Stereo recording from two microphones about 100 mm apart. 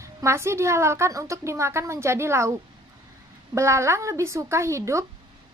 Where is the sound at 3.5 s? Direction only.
30° right (ahead or behind).